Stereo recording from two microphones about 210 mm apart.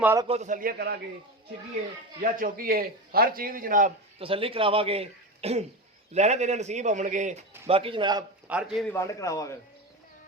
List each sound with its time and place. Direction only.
0.0 s a man's voice: 10° right (ahead or behind)
0.3 s a man's voice: 35° right (ahead or behind)
2.2 s a man's voice: 40° right (ahead or behind)
4.2 s a man's voice: 25° right (ahead or behind)
7.7 s a man's voice: 25° right (ahead or behind)
8.4 s a man's voice: 5° right (ahead or behind)
8.9 s speech: 15° left (ahead or behind)